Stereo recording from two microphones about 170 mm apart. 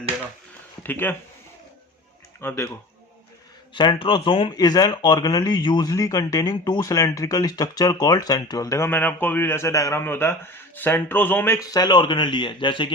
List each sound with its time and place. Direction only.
0.8 s speech: 10° left (ahead or behind)
2.4 s speech: 15° left (ahead or behind)
3.8 s speech: 30° left (ahead or behind)